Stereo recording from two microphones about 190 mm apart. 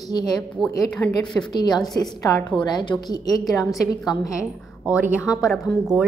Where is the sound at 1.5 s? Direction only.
20° left (ahead or behind).